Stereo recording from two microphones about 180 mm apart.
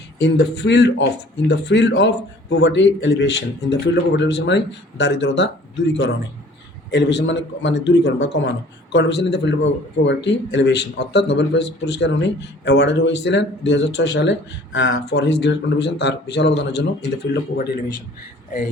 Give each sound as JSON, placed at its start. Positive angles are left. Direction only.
{"t": 0.2, "sound": "speech", "side_deg": 70}